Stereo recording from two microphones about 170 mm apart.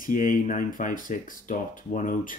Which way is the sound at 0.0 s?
55° left (ahead or behind).